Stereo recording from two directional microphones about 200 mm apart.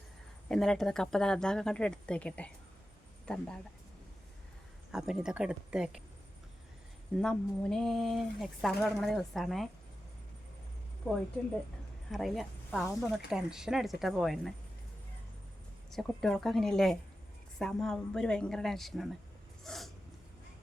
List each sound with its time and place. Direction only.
0.4 s speech: centre (ahead or behind)
4.9 s speech: 5° right (ahead or behind)
7.2 s speech: 5° left (ahead or behind)
12.1 s a woman's voice: centre (ahead or behind)
15.9 s speech: centre (ahead or behind)
19.6 s a sound: centre (ahead or behind)